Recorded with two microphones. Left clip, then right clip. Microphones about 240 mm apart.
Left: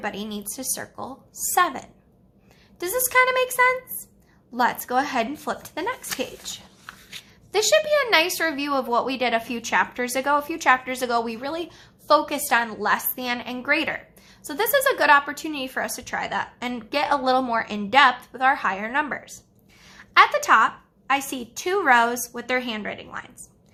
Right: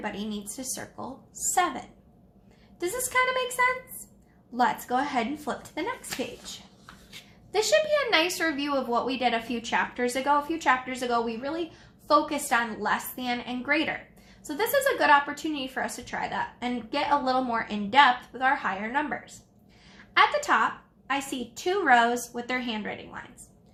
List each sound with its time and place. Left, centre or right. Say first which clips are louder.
0.0 s a woman's voice: left 4 dB; left
7.5 s a woman's voice: left 4 dB; left